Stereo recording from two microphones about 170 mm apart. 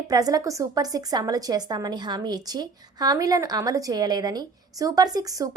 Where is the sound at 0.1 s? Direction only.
20° right (ahead or behind).